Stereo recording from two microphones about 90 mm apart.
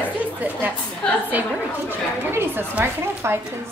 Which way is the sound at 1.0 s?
15° left (ahead or behind).